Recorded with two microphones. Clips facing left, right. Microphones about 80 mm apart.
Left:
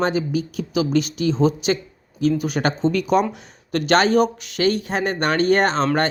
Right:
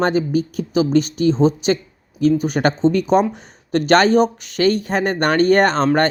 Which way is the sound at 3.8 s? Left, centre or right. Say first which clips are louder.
Right 3 dB; right.